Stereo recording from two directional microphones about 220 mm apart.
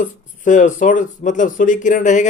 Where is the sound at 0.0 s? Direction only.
35° left (ahead or behind).